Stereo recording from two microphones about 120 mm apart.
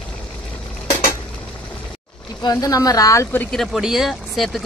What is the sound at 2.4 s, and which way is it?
Speech, 30° left (ahead or behind).